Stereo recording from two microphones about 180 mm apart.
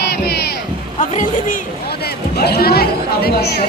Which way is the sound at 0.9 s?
45° left (ahead or behind).